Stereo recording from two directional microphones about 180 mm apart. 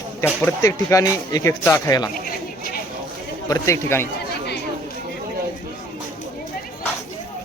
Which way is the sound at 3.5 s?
15° left (ahead or behind).